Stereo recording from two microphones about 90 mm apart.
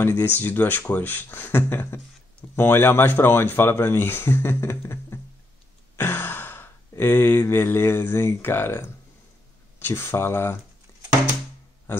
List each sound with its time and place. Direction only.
0.0 s speech: 25° left (ahead or behind)